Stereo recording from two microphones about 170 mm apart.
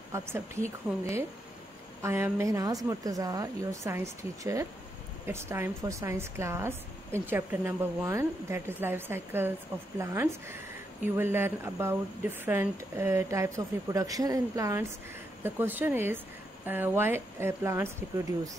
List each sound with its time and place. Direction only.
0.1 s a woman's voice: 15° right (ahead or behind)
2.0 s a woman's voice: 15° right (ahead or behind)